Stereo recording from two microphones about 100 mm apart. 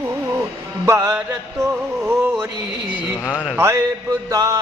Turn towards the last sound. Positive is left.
turn(degrees=-35)  # may be behind; listen again after turning